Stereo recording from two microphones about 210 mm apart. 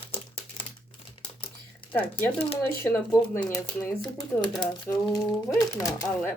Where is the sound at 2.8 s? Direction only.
10° left (ahead or behind).